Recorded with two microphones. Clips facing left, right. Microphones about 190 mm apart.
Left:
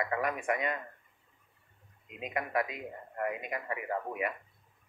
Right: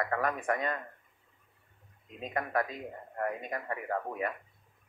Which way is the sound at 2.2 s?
10° left (ahead or behind).